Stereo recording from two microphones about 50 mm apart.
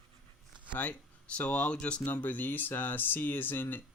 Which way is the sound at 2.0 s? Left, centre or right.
Left.